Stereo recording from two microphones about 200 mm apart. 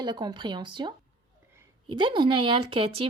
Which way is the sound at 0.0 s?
20° right (ahead or behind).